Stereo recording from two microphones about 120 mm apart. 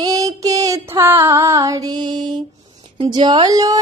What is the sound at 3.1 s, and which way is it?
Speech, 40° right (ahead or behind).